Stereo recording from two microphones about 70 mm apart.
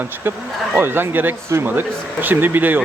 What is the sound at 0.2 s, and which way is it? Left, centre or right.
Speech, right.